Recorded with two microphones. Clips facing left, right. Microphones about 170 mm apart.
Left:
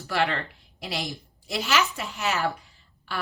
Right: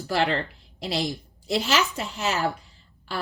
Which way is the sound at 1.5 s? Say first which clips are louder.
Right 2 dB; 30° right (ahead or behind).